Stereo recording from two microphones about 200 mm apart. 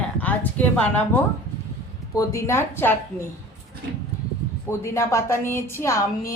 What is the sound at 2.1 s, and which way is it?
Speech, 15° left (ahead or behind).